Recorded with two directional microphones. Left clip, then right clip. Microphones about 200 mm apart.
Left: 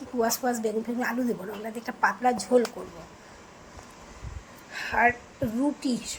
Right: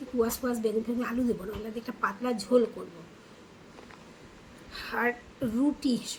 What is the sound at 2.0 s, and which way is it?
Speech, 10° right (ahead or behind).